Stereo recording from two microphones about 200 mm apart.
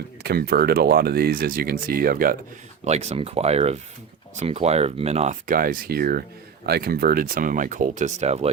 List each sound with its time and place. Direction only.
0.2 s speech: 50° right (ahead or behind)
2.8 s speech: 35° right (ahead or behind)